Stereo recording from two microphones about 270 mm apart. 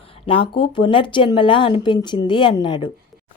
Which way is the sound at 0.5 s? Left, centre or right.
Centre.